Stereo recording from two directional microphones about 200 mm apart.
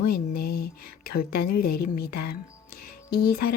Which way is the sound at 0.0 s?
50° left (ahead or behind).